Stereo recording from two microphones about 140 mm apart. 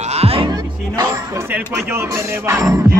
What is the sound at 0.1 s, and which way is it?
Music, 45° right (ahead or behind).